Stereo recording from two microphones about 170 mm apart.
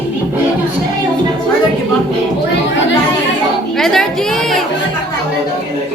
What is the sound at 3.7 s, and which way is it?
Chatter, centre (ahead or behind).